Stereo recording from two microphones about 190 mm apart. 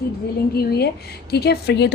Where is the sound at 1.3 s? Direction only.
60° left (ahead or behind).